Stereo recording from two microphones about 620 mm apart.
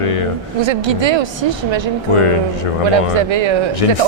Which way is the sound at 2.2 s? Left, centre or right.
Left.